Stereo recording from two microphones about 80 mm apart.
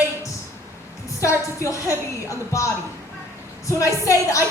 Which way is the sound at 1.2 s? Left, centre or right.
Left.